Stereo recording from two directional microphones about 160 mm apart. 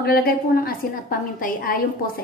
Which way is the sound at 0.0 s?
70° left (ahead or behind).